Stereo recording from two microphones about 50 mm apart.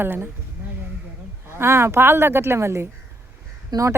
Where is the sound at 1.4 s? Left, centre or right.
Right.